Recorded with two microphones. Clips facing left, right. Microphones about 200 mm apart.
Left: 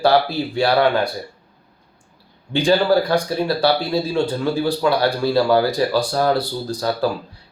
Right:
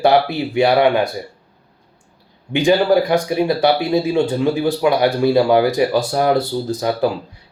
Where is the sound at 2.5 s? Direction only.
20° right (ahead or behind).